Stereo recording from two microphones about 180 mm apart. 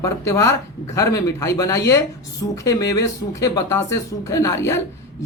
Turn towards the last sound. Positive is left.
turn(degrees=15)  # may be behind; listen again after turning